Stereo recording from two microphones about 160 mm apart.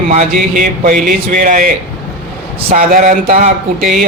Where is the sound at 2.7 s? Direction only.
60° right (ahead or behind).